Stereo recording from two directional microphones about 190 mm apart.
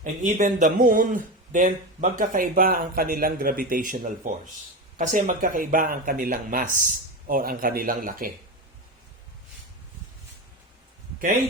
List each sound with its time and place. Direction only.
0.0 s speech: 40° right (ahead or behind)